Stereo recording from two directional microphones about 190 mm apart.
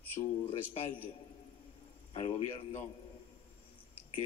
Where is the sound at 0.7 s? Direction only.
30° left (ahead or behind).